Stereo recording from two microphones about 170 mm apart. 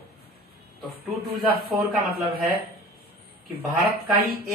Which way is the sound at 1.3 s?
65° right (ahead or behind).